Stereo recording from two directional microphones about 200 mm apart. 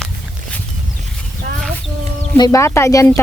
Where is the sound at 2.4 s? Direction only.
15° left (ahead or behind).